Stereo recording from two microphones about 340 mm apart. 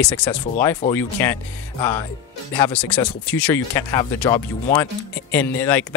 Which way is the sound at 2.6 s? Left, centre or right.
Centre.